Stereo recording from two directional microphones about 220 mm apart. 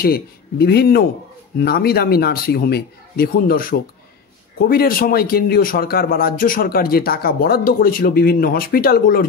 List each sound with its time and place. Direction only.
0.0 s a man's voice: 45° left (ahead or behind)